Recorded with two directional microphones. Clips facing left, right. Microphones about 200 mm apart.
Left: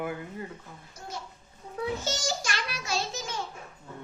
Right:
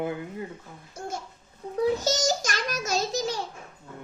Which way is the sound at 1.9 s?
40° right (ahead or behind).